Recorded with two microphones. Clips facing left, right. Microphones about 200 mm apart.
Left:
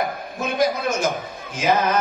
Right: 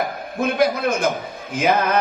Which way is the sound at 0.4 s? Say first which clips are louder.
Right 3 dB; 60° right (ahead or behind).